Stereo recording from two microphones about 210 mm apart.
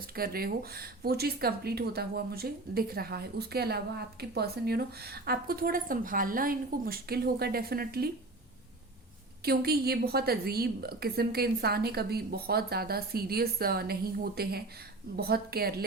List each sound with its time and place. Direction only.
0.2 s speech: 45° right (ahead or behind)
9.4 s speech: 45° right (ahead or behind)